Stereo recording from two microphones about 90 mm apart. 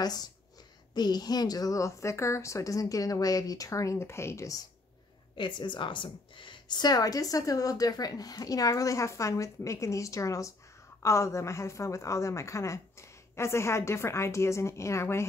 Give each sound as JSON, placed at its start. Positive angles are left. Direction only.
{"t": 0.0, "sound": "a woman's voice", "side_deg": 45}
{"t": 5.4, "sound": "a woman's voice", "side_deg": 60}